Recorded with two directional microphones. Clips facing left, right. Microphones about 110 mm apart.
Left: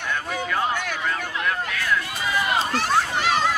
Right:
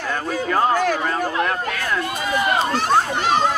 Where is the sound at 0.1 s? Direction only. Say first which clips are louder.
Right 5 dB; 40° right (ahead or behind).